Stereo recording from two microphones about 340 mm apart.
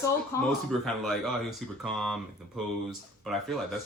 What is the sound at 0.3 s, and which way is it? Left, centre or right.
Speech, centre.